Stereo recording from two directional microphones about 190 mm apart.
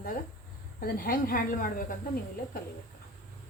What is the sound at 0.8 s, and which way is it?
A woman's voice, 50° left (ahead or behind).